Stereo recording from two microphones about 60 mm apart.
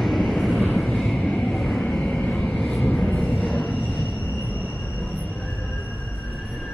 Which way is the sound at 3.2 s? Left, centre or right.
Centre.